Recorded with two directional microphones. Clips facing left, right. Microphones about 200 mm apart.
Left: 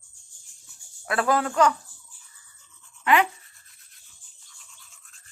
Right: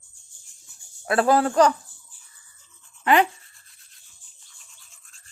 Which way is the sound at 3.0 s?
35° right (ahead or behind).